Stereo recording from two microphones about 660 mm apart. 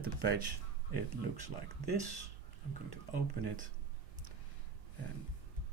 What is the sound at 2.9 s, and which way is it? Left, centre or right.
Speech, right.